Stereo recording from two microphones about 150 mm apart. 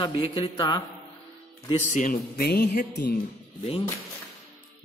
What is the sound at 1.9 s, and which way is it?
Speech, 65° left (ahead or behind).